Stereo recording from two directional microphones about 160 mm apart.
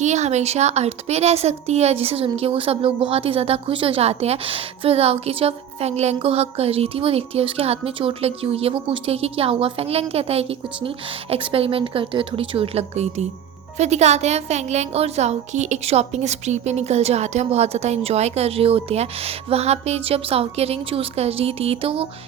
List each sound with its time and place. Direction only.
0.0 s a woman's voice: 45° right (ahead or behind)